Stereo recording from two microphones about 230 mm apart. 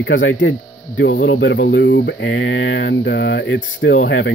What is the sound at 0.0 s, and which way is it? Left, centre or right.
Speech, left.